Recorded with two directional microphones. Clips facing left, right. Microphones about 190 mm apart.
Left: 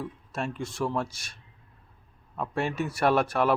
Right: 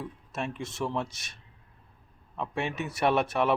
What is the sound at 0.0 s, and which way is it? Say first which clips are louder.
Speech: left 2 dB; 20° right (ahead or behind).